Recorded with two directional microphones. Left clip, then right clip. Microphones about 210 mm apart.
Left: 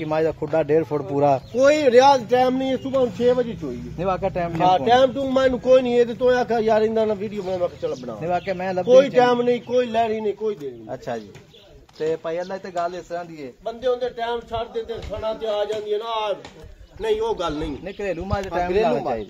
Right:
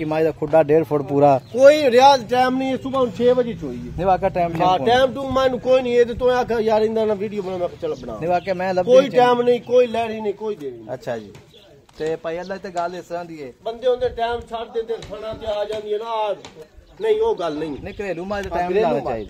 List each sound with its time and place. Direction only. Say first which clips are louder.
0.0 s speech: right 2 dB; 50° right (ahead or behind)
13.7 s a man's voice: right 3 dB; 15° right (ahead or behind)
15.4 s speech: right 2 dB; 10° left (ahead or behind)
17.8 s speech: right 1 dB; 40° right (ahead or behind)